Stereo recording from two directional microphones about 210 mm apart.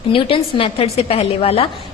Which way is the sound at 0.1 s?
25° left (ahead or behind).